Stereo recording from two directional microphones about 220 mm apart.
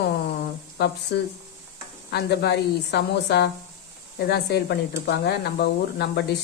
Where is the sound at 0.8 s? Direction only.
50° left (ahead or behind).